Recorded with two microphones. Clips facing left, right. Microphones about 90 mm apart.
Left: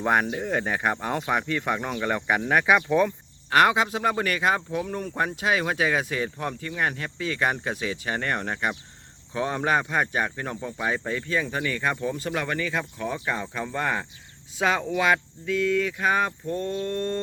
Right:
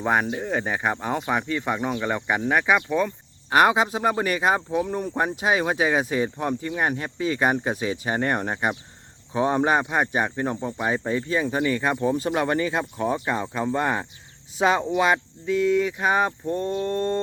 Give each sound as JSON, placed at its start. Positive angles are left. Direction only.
{"t": 0.0, "sound": "speech", "side_deg": -5}
{"t": 3.5, "sound": "speech", "side_deg": -15}